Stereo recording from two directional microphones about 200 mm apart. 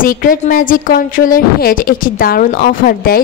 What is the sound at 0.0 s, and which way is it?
A woman's voice, 45° left (ahead or behind).